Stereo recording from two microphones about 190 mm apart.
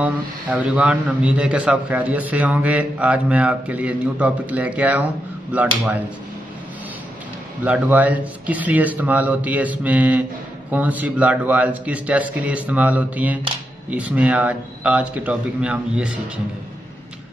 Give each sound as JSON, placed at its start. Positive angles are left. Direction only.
{"t": 0.0, "sound": "a man's voice", "side_deg": -5}
{"t": 7.6, "sound": "a man's voice", "side_deg": -10}